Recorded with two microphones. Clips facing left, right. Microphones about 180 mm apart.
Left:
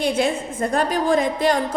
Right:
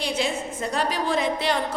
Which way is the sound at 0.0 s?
50° left (ahead or behind).